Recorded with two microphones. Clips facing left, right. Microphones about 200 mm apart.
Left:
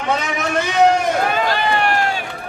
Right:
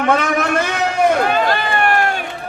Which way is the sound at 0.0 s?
60° right (ahead or behind).